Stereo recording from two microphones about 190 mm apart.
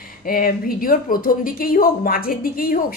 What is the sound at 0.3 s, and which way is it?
Speech, 50° left (ahead or behind).